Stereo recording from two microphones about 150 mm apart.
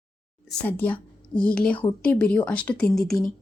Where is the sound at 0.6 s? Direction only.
10° left (ahead or behind).